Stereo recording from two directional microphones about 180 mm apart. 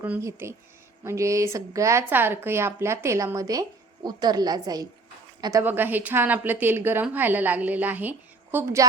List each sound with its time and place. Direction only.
0.0 s a woman's voice: 15° right (ahead or behind)